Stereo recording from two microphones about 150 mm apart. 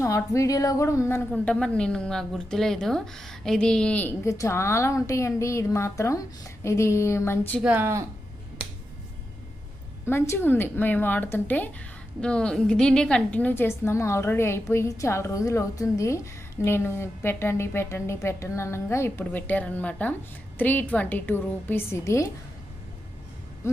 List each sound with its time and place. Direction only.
0.0 s a woman's voice: 20° left (ahead or behind)
1.3 s a woman's voice: 5° left (ahead or behind)
7.6 s speech: 10° right (ahead or behind)
10.1 s a woman's voice: 15° left (ahead or behind)
23.6 s music: 20° left (ahead or behind)